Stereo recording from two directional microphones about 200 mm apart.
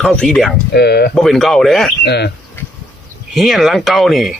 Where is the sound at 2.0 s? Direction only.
55° left (ahead or behind).